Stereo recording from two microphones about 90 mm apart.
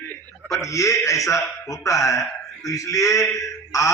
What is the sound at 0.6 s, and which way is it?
A man's voice, 35° left (ahead or behind).